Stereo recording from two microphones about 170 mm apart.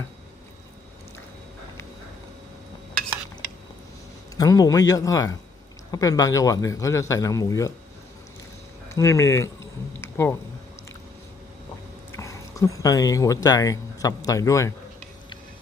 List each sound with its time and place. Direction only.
4.4 s a man's voice: 20° left (ahead or behind)
8.9 s speech: 20° left (ahead or behind)
10.0 s a sound: 15° left (ahead or behind)
12.1 s speech: 20° left (ahead or behind)